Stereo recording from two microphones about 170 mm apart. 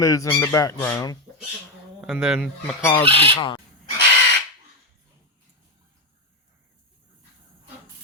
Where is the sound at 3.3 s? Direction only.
30° left (ahead or behind).